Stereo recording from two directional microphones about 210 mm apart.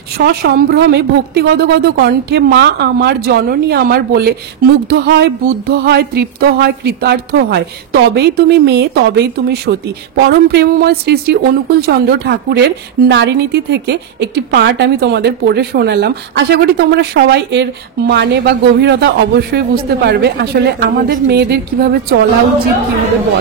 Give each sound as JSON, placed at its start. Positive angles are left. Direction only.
{"t": 0.2, "sound": "speech", "side_deg": -50}